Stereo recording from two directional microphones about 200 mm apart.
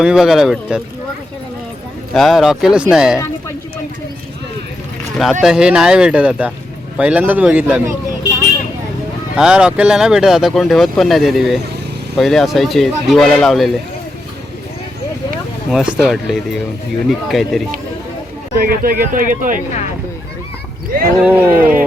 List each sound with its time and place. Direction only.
0.0 s speech: 5° right (ahead or behind)
2.1 s speech: centre (ahead or behind)
5.1 s a man's voice: centre (ahead or behind)
9.3 s speech: 5° right (ahead or behind)
15.7 s speech: 5° right (ahead or behind)
18.6 s speech: 50° right (ahead or behind)
21.2 s a man's voice: 10° right (ahead or behind)